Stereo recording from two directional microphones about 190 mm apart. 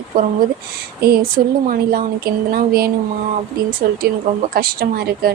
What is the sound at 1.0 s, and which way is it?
Speech, 55° right (ahead or behind).